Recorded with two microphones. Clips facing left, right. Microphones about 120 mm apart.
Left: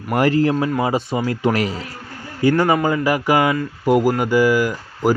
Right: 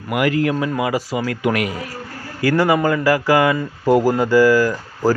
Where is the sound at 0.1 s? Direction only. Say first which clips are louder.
Left 2 dB; 35° left (ahead or behind).